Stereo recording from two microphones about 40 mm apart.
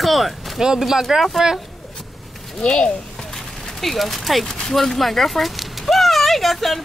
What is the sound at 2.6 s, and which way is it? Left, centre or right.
Speech, left.